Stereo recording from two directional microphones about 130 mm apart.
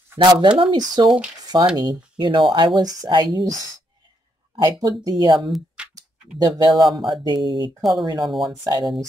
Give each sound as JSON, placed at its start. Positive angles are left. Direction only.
{"t": 0.2, "sound": "speech", "side_deg": -35}
{"t": 4.6, "sound": "speech", "side_deg": -30}
{"t": 6.8, "sound": "speech", "side_deg": 0}
{"t": 7.1, "sound": "speech", "side_deg": -35}